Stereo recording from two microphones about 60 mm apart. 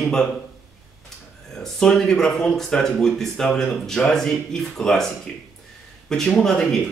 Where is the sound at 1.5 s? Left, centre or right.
Centre.